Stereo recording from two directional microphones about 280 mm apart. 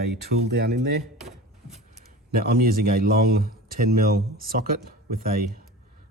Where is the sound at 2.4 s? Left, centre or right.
Right.